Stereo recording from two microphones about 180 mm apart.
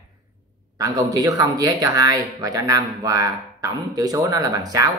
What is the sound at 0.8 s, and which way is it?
Speech, 20° right (ahead or behind).